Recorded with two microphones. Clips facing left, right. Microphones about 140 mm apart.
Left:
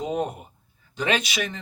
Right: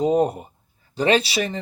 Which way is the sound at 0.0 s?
35° right (ahead or behind).